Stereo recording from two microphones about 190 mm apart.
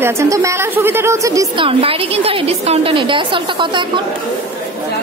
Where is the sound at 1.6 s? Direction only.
30° right (ahead or behind).